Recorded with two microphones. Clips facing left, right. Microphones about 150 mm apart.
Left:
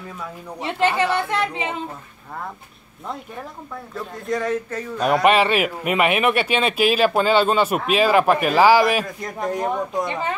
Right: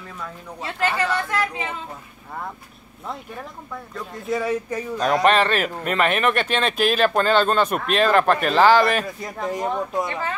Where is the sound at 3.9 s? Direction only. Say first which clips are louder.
Left 1 dB; centre (ahead or behind).